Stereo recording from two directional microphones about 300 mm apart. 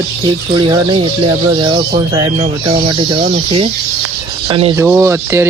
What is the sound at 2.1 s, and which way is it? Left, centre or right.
Speech, centre.